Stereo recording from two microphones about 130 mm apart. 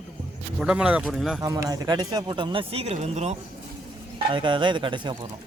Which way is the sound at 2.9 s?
60° right (ahead or behind).